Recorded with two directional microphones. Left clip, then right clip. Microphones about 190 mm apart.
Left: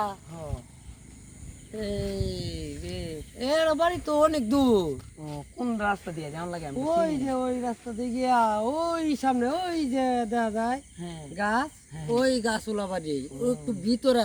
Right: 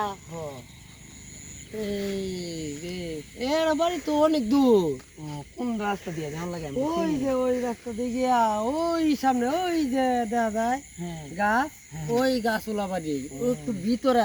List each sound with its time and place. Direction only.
1.8 s speech: 5° left (ahead or behind)
6.9 s speech: 20° left (ahead or behind)
12.0 s speech: centre (ahead or behind)